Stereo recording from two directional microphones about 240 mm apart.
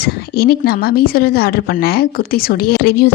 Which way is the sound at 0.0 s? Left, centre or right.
Left.